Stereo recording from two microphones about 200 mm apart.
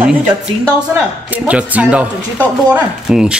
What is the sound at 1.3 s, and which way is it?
Speech, 5° right (ahead or behind).